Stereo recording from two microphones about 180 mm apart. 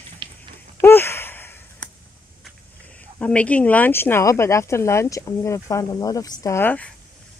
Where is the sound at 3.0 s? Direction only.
5° left (ahead or behind).